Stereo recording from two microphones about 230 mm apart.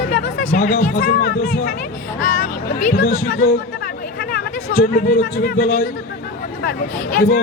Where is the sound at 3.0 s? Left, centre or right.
Left.